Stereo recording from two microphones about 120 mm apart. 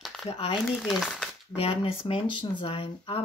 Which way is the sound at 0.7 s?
Centre (ahead or behind).